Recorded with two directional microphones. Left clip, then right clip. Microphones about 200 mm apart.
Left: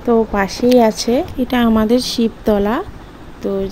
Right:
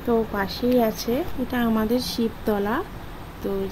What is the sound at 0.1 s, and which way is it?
A woman's voice, 35° left (ahead or behind).